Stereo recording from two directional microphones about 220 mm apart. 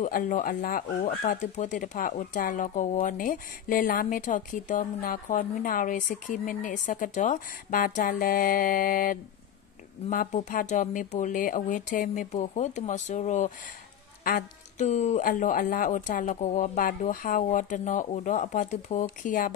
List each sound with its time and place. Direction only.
0.0 s speech: 35° left (ahead or behind)